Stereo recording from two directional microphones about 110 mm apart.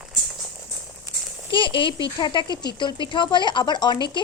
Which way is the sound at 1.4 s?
50° left (ahead or behind).